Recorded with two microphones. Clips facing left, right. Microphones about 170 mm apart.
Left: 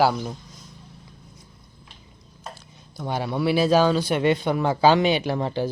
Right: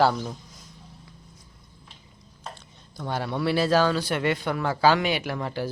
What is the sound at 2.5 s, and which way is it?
Speech, 15° left (ahead or behind).